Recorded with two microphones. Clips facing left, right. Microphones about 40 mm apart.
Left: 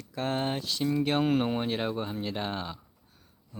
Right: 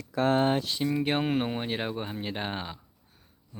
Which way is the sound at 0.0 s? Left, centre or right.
Right.